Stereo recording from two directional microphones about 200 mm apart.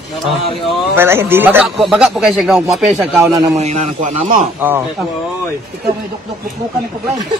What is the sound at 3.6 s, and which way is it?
Speech, 40° right (ahead or behind).